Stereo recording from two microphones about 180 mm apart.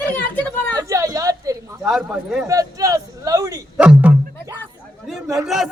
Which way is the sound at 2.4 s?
20° right (ahead or behind).